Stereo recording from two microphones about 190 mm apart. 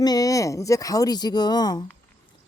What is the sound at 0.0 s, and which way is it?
A woman's voice, 20° left (ahead or behind).